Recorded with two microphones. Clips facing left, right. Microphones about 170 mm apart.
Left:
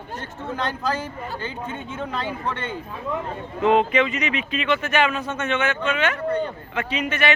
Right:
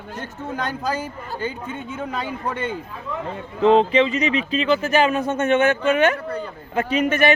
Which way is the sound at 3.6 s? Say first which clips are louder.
Right 3 dB; 30° right (ahead or behind).